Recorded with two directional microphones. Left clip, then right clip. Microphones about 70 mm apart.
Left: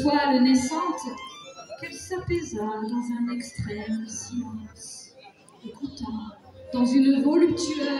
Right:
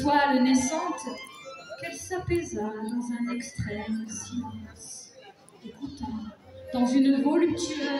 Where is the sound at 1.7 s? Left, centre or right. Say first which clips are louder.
Left 1 dB; right.